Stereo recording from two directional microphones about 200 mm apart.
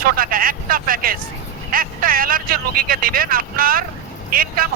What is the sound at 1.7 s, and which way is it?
Speech, 45° right (ahead or behind).